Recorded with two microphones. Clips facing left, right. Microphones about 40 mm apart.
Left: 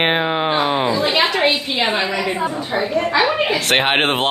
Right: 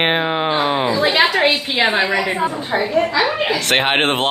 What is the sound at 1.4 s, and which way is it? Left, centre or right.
Speech, right.